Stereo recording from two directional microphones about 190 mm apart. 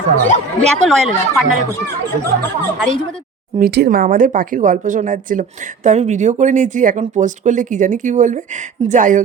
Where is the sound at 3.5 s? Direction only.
55° right (ahead or behind).